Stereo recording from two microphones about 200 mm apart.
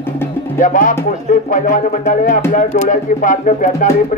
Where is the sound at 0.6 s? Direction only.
40° left (ahead or behind).